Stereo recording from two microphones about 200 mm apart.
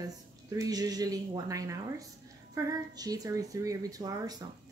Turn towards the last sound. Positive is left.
turn(degrees=-20)  # may be behind; listen again after turning